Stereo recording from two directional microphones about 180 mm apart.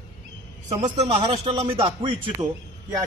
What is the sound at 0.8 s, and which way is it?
A man's voice, 35° right (ahead or behind).